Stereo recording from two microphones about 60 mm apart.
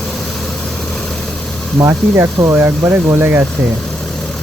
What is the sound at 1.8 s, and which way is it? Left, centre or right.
Speech, right.